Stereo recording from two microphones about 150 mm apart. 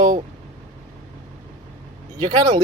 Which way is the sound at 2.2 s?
25° right (ahead or behind).